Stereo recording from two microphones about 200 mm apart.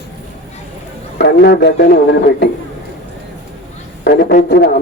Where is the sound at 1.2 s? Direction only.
55° left (ahead or behind).